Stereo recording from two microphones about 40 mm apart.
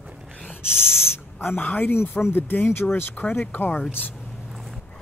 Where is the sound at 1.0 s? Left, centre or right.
Left.